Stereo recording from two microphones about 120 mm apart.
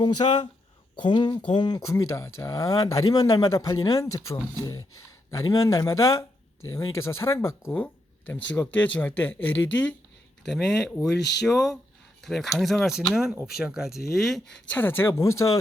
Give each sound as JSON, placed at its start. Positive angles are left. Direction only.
{"t": 0.0, "sound": "speech", "side_deg": 40}
{"t": 10.4, "sound": "speech", "side_deg": 5}
{"t": 14.7, "sound": "speech", "side_deg": 15}